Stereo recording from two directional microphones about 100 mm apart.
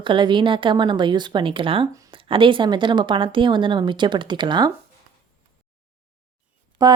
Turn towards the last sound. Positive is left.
turn(degrees=-40)  # may be behind; listen again after turning